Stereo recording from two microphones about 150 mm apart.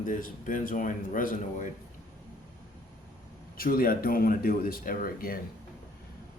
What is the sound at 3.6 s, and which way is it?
Speech, 70° left (ahead or behind).